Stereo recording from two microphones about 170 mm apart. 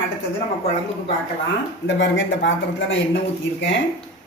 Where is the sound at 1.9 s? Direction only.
90° left.